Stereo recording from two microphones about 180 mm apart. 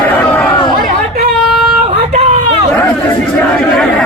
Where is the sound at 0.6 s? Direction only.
25° left (ahead or behind).